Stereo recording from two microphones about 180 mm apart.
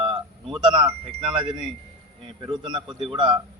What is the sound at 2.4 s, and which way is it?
Speech, 25° right (ahead or behind).